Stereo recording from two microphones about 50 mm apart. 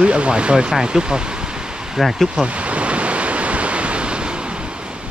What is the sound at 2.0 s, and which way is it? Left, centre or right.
Speech, centre.